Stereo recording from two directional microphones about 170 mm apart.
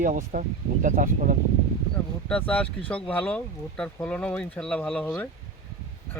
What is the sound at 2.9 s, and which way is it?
Speech, 10° left (ahead or behind).